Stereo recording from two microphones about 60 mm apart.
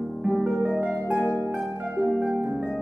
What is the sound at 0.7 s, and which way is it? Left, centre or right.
Harp, right.